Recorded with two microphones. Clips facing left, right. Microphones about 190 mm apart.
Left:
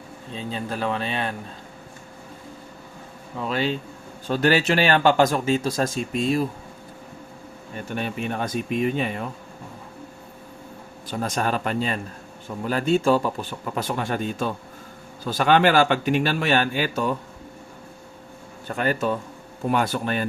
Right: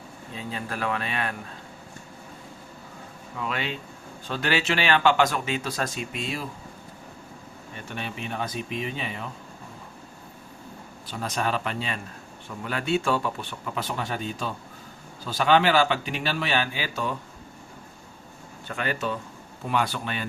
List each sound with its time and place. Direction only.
0.3 s speech: 25° left (ahead or behind)
3.3 s a man's voice: 35° left (ahead or behind)
7.9 s speech: 50° left (ahead or behind)
11.2 s speech: 45° left (ahead or behind)
18.7 s speech: 45° left (ahead or behind)